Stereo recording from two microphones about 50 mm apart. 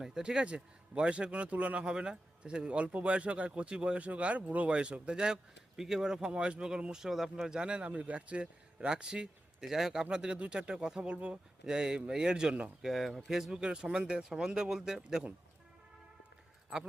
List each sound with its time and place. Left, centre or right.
0.0 s a man's voice: centre
12.8 s speech: centre